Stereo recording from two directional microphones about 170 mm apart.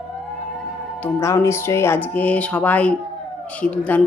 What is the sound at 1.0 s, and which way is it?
A woman's voice, 15° left (ahead or behind).